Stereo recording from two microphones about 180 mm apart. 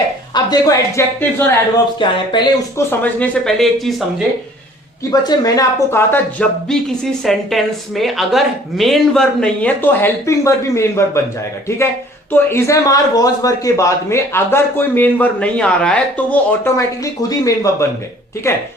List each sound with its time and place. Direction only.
0.3 s speech: 20° left (ahead or behind)
2.0 s speech: 25° left (ahead or behind)
3.0 s speech: 5° left (ahead or behind)
5.3 s speech: 20° left (ahead or behind)
12.3 s speech: 15° left (ahead or behind)